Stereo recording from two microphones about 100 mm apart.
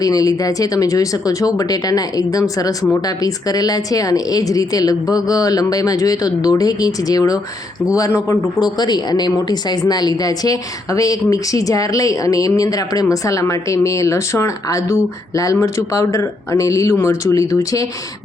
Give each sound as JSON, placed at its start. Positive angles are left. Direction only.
{"t": 0.0, "sound": "a woman's voice", "side_deg": 35}
{"t": 8.6, "sound": "a woman's voice", "side_deg": 45}